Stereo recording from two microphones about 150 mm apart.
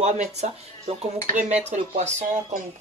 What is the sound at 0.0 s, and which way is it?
Speech, 50° right (ahead or behind).